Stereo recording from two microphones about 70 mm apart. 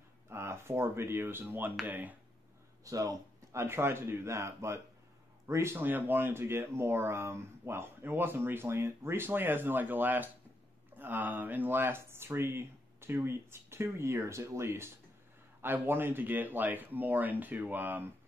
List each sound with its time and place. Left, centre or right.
0.3 s speech: right
2.8 s speech: right
3.6 s speech: right
5.8 s speech: right
15.6 s speech: right